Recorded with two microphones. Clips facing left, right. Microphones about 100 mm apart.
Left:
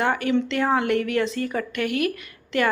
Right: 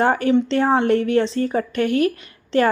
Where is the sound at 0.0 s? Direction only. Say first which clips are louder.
Right 5 dB; 35° right (ahead or behind).